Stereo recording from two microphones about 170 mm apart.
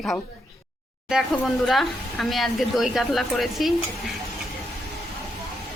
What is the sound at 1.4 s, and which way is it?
A woman's voice, centre (ahead or behind).